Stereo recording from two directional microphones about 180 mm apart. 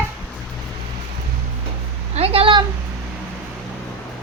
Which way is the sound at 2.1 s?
35° right (ahead or behind).